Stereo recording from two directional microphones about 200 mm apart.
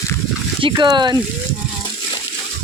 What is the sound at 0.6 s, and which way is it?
Speech, 20° right (ahead or behind).